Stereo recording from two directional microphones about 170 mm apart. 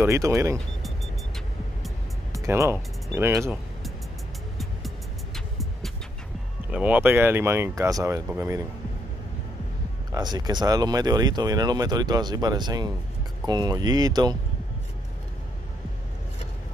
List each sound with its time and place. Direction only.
0.0 s speech: 15° right (ahead or behind)
2.3 s speech: 20° right (ahead or behind)
4.6 s music: centre (ahead or behind)
6.7 s speech: 10° right (ahead or behind)
10.1 s speech: 25° right (ahead or behind)